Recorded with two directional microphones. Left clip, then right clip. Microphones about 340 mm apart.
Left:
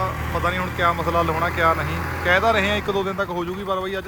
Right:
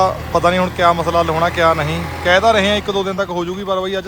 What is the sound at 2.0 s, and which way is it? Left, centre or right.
Speech, centre.